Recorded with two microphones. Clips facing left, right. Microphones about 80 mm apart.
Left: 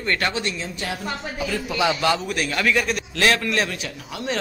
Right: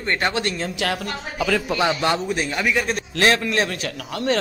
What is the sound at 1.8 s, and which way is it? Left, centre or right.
A man's voice, right.